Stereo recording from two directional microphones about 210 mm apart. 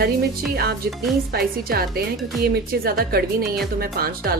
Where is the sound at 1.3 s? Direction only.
45° right (ahead or behind).